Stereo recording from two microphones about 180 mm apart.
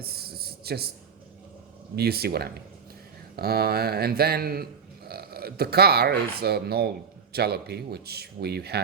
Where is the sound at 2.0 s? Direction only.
60° right (ahead or behind).